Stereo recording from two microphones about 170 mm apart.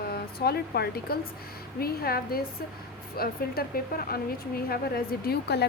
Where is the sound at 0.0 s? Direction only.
65° left (ahead or behind).